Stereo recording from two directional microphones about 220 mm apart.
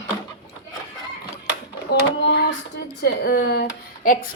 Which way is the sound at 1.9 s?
50° left (ahead or behind).